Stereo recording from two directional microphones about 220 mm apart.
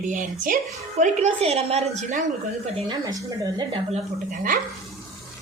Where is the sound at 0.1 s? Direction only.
40° right (ahead or behind).